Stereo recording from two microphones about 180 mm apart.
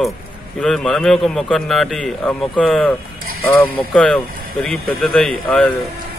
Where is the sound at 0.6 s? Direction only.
5° left (ahead or behind).